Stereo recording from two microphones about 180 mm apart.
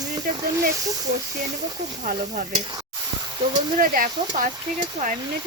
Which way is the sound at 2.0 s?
45° right (ahead or behind).